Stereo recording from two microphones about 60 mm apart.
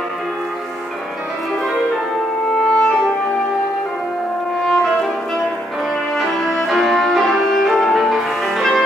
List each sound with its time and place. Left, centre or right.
2.7 s music: centre
4.6 s brass instrument: centre
6.4 s music: centre